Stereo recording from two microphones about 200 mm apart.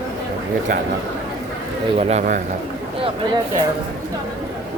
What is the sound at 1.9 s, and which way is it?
Speech, 35° right (ahead or behind).